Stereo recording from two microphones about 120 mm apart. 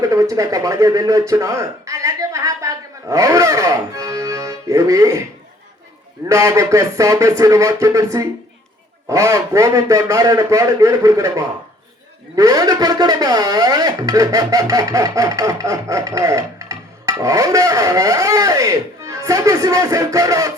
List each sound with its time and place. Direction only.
0.0 s speech: 30° right (ahead or behind)
6.2 s speech: 25° right (ahead or behind)